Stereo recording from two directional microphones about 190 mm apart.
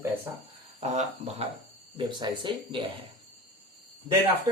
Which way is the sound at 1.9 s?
25° right (ahead or behind).